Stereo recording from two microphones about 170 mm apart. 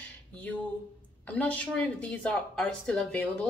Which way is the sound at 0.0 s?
5° left (ahead or behind).